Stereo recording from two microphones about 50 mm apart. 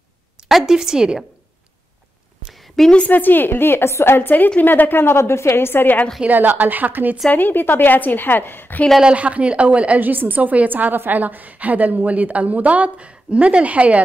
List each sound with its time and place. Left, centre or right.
0.5 s speech: centre
2.5 s a sound: centre
3.1 s a woman's voice: left
6.2 s a woman's voice: right
7.2 s a woman's voice: left
9.0 s a woman's voice: right